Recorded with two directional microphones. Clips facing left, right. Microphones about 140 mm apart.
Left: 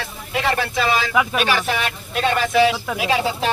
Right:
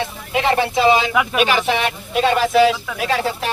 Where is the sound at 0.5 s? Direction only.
20° right (ahead or behind).